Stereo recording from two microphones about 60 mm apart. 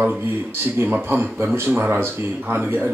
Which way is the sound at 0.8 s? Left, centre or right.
Right.